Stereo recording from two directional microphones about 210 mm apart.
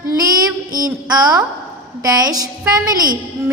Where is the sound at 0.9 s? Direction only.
20° right (ahead or behind).